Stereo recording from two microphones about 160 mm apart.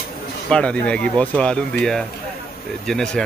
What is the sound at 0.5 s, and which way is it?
Speech, 5° left (ahead or behind).